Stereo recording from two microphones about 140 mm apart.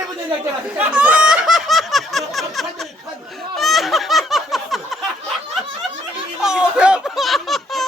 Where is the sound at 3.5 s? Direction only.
Centre (ahead or behind).